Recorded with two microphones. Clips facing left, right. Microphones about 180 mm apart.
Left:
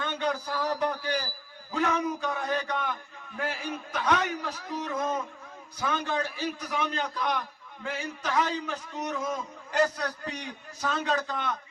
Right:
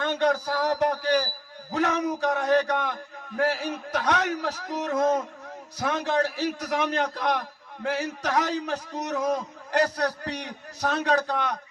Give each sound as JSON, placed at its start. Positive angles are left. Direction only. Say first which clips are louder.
{"t": 0.0, "sound": "a man's voice", "louder": "right 6 dB", "side_deg": -80}